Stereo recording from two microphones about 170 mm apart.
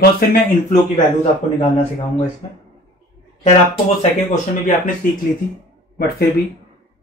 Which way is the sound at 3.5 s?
45° left (ahead or behind).